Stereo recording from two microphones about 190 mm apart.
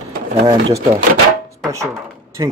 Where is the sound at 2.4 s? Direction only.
20° right (ahead or behind).